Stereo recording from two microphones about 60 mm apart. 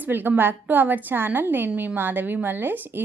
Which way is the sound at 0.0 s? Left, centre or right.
Right.